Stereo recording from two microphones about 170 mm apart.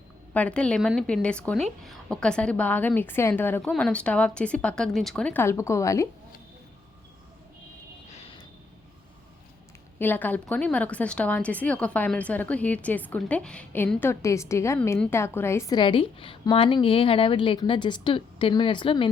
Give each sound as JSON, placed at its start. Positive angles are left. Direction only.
{"t": 0.3, "sound": "a woman's voice", "side_deg": 5}
{"t": 8.1, "sound": "vehicle", "side_deg": 35}
{"t": 10.0, "sound": "a woman's voice", "side_deg": 10}